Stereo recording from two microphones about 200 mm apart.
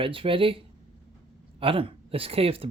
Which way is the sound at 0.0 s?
25° right (ahead or behind).